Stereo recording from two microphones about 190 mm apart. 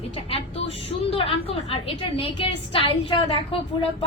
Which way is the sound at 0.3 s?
30° left (ahead or behind).